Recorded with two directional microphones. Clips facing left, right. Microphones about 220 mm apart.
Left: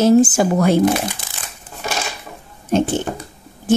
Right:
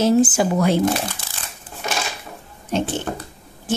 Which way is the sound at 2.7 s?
50° left (ahead or behind).